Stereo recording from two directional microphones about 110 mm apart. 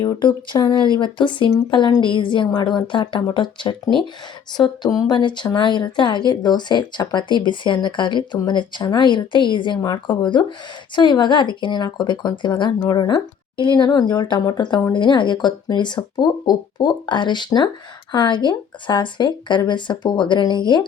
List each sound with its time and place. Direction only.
0.0 s speech: 45° left (ahead or behind)